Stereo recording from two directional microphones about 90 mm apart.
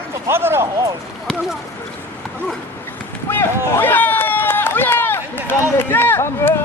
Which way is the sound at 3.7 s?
25° left (ahead or behind).